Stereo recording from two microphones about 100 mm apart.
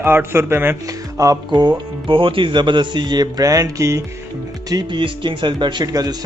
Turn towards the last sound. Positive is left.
turn(degrees=-40)  # may be behind; listen again after turning